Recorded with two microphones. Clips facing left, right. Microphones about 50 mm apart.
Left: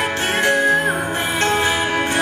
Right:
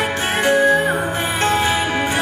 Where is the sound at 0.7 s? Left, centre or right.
Centre.